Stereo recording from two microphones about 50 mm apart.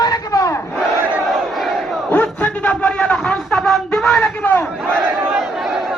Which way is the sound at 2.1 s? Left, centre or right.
Left.